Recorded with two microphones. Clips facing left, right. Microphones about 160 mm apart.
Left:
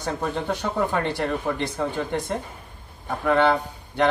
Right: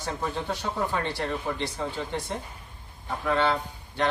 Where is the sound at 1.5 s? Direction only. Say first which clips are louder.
Left 5 dB; 75° left (ahead or behind).